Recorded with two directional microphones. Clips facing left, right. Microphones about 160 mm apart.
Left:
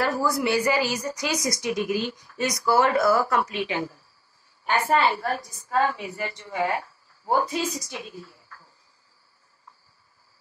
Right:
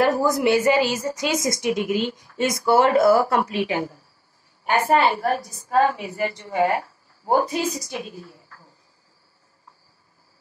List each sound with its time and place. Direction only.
0.0 s a woman's voice: 20° right (ahead or behind)
4.7 s a woman's voice: 20° right (ahead or behind)